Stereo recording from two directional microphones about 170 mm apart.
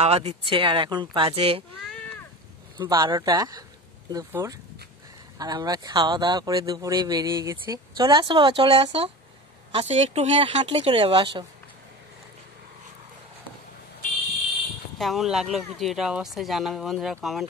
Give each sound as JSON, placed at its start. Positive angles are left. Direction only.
{"t": 0.0, "sound": "speech", "side_deg": -40}
{"t": 2.8, "sound": "speech", "side_deg": -25}
{"t": 15.0, "sound": "speech", "side_deg": 0}